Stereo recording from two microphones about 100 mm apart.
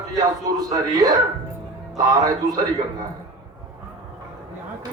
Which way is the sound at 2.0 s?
35° right (ahead or behind).